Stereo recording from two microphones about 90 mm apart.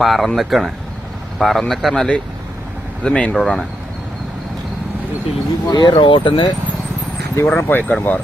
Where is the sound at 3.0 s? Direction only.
10° left (ahead or behind).